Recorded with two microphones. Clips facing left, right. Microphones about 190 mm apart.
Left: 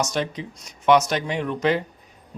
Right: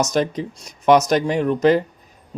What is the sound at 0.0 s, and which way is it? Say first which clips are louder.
Speech: right 5 dB; 40° right (ahead or behind).